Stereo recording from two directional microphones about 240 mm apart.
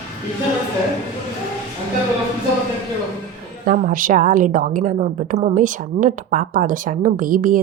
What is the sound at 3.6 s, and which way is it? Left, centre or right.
A woman's voice, right.